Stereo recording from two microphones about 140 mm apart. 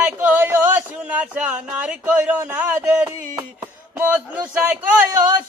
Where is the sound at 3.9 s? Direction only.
15° right (ahead or behind).